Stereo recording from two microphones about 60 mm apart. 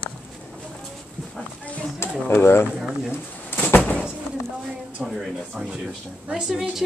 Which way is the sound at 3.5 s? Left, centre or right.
Left.